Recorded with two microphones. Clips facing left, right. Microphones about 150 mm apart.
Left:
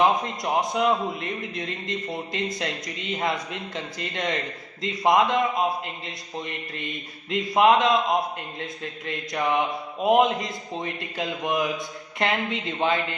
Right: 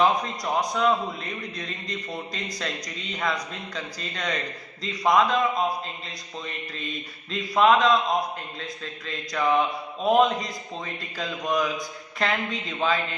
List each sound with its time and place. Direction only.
0.0 s mantra: 20° left (ahead or behind)